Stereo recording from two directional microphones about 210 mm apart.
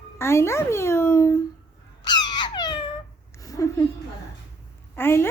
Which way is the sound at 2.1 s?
20° left (ahead or behind).